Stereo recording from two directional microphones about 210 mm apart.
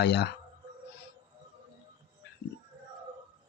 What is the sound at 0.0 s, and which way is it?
Speech, 50° left (ahead or behind).